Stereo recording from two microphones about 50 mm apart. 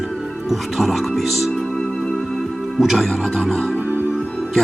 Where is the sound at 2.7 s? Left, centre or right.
Centre.